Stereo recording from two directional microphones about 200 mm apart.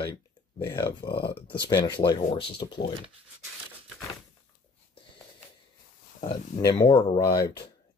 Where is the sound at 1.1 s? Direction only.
50° left (ahead or behind).